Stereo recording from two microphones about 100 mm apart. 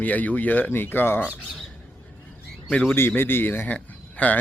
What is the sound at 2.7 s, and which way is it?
Speech, 20° left (ahead or behind).